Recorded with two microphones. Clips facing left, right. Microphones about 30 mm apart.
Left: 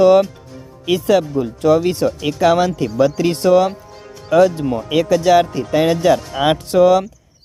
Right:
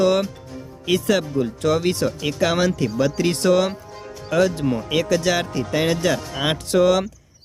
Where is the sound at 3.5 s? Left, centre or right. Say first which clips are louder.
Left 5 dB; centre.